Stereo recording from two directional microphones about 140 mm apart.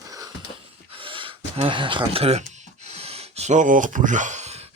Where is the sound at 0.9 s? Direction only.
40° right (ahead or behind).